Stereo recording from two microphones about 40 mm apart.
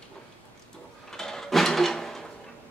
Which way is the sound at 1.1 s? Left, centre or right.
Centre.